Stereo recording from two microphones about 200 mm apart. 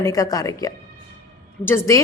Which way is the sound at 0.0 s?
15° left (ahead or behind).